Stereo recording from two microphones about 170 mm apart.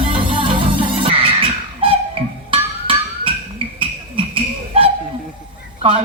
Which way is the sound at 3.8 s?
30° right (ahead or behind).